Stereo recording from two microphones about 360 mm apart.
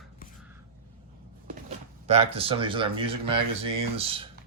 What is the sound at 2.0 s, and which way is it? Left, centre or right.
Speech, centre.